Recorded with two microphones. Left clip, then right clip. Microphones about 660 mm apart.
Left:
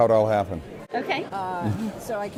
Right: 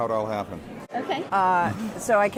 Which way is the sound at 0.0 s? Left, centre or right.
Left.